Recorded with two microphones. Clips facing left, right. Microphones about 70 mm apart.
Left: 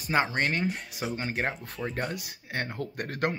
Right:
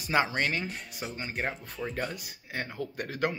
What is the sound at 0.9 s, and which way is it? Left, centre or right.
Speech, left.